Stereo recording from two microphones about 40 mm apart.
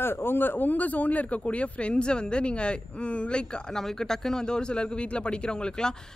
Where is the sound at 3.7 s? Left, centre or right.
Centre.